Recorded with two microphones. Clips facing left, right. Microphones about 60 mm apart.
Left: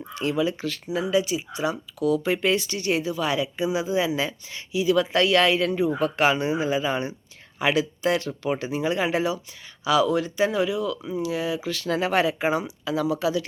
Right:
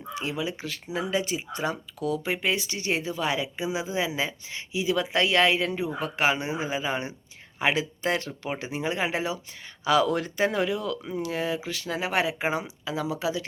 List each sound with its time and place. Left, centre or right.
0.1 s speech: right
0.9 s speech: right
9.8 s speech: right
11.7 s speech: right